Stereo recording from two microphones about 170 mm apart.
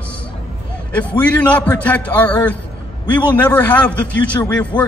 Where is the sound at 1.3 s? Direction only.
10° left (ahead or behind).